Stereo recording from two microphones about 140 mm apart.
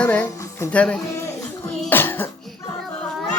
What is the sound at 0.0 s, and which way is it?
Speech, 10° left (ahead or behind).